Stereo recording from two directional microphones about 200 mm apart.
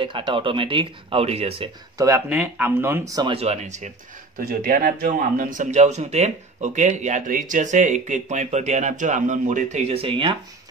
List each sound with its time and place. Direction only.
0.0 s speech: 25° right (ahead or behind)
2.0 s speech: 15° right (ahead or behind)